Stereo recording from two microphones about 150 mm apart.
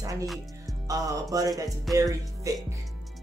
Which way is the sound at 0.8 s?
20° right (ahead or behind).